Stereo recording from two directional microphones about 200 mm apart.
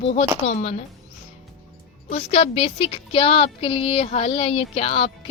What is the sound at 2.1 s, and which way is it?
A woman's voice, 30° left (ahead or behind).